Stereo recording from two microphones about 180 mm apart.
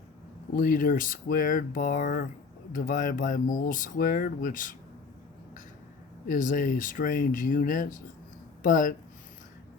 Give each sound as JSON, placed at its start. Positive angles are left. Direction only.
{"t": 0.5, "sound": "speech", "side_deg": 50}
{"t": 6.2, "sound": "speech", "side_deg": 45}